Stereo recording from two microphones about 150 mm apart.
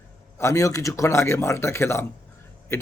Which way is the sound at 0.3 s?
20° left (ahead or behind).